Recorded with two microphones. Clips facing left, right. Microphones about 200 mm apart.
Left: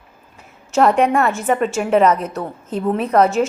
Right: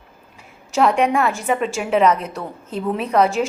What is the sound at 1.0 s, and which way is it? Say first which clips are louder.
A woman's voice: left 2 dB; centre (ahead or behind).